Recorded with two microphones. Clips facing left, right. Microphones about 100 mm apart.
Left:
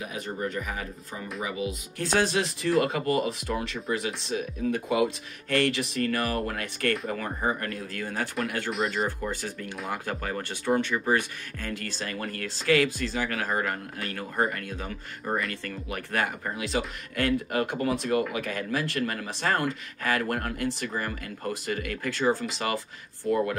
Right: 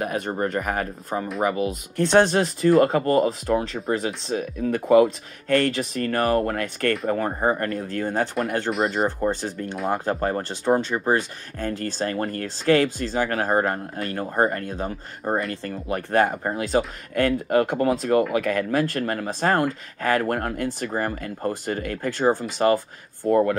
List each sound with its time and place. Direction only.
0.0 s speech: 55° right (ahead or behind)
18.3 s speech: 55° right (ahead or behind)